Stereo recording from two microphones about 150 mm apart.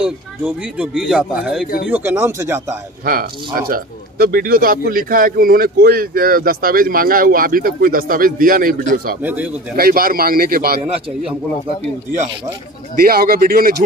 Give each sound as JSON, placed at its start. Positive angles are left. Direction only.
{"t": 0.0, "sound": "speech", "side_deg": -10}
{"t": 1.9, "sound": "speech", "side_deg": -15}
{"t": 3.1, "sound": "speech", "side_deg": -70}
{"t": 9.2, "sound": "speech", "side_deg": -10}
{"t": 9.8, "sound": "a man's voice", "side_deg": -80}
{"t": 12.9, "sound": "a man's voice", "side_deg": -90}